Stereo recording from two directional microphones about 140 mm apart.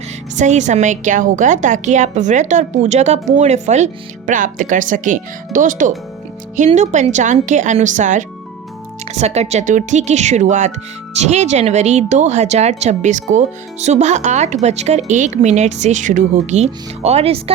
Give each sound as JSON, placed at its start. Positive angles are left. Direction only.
{"t": 0.3, "sound": "speech", "side_deg": -60}
{"t": 4.3, "sound": "speech", "side_deg": -70}
{"t": 6.7, "sound": "speech", "side_deg": -55}
{"t": 9.1, "sound": "speech", "side_deg": -50}